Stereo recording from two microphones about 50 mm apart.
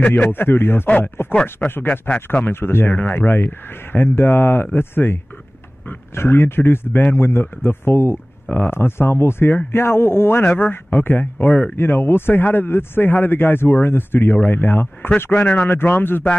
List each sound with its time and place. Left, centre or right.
0.0 s speech: left
1.6 s speech: left
2.4 s speech: left
2.9 s speech: left
10.4 s speech: left
11.7 s speech: left